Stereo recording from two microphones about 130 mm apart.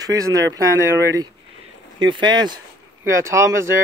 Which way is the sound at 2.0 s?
35° right (ahead or behind).